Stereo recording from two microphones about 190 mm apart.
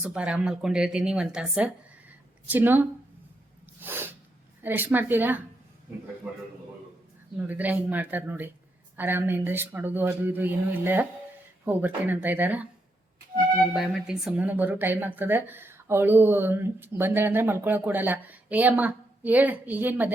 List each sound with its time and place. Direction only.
0.0 s a woman's voice: 5° right (ahead or behind)
3.8 s sneeze: 10° right (ahead or behind)
4.6 s a woman's voice: 10° right (ahead or behind)
7.3 s a woman's voice: 10° right (ahead or behind)
13.7 s a woman's voice: 5° right (ahead or behind)